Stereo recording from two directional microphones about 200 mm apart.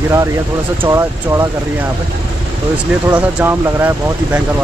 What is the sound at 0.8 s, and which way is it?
Speech, 15° right (ahead or behind).